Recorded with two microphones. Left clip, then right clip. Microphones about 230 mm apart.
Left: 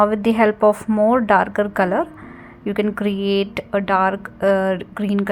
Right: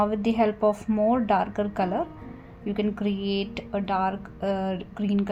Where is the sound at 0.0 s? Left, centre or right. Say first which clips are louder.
Left 8 dB; left.